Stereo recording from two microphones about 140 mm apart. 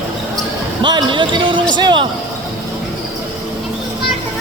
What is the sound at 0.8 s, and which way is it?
Basketball bounce, 35° right (ahead or behind).